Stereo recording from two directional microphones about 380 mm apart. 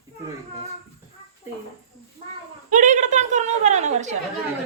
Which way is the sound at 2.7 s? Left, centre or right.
Centre.